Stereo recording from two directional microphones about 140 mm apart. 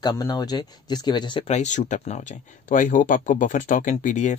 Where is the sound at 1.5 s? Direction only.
60° left (ahead or behind).